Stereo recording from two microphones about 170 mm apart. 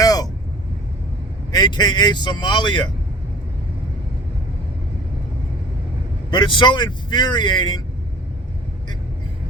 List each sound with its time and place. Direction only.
0.0 s vehicle: 20° left (ahead or behind)
1.5 s speech: 25° left (ahead or behind)
6.3 s speech: 30° left (ahead or behind)